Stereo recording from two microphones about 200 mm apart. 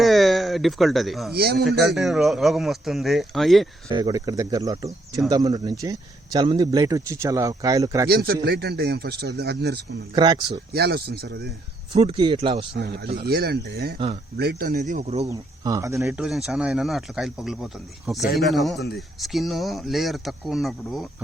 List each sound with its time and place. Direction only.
0.0 s speech: centre (ahead or behind)
3.8 s speech: 20° right (ahead or behind)
8.1 s speech: 50° right (ahead or behind)
10.2 s speech: 25° right (ahead or behind)
10.8 s speech: 55° right (ahead or behind)
11.9 s speech: 25° right (ahead or behind)
12.7 s speech: 50° right (ahead or behind); by 15.3 s 30° right (ahead or behind)
15.3 s speech: 15° right (ahead or behind); by 21.1 s centre (ahead or behind)